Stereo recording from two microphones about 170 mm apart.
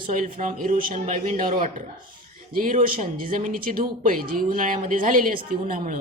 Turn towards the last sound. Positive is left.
turn(degrees=-55)  # may be behind; listen again after turning